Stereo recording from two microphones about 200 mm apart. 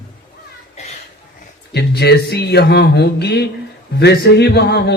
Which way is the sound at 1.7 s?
55° left (ahead or behind).